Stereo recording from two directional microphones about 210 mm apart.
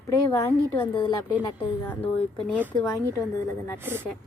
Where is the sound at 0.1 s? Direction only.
10° left (ahead or behind).